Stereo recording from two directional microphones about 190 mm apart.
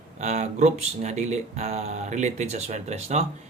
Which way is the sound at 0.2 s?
40° right (ahead or behind).